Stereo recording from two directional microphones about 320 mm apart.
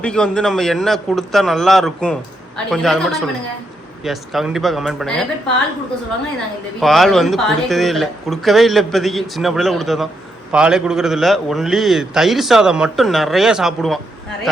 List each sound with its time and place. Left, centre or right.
0.0 s a man's voice: centre
6.7 s a man's voice: centre